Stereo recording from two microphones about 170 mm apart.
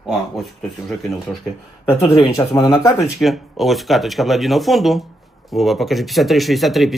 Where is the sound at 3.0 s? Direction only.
Centre (ahead or behind).